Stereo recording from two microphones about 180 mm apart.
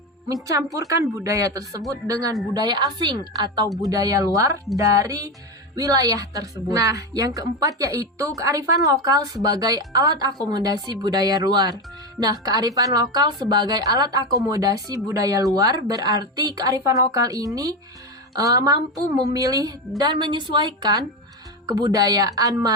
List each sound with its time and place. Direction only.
0.4 s a woman's voice: 20° right (ahead or behind)